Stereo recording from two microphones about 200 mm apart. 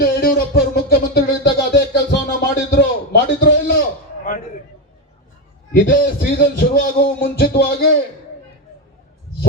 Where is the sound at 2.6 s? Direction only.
60° left (ahead or behind).